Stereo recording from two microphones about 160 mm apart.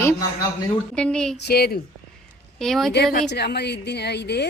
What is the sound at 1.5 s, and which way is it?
Speech, 75° left (ahead or behind).